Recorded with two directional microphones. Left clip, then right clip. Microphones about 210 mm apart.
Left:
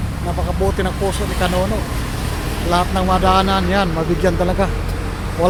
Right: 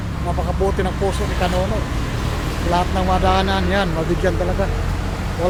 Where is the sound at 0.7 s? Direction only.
15° left (ahead or behind).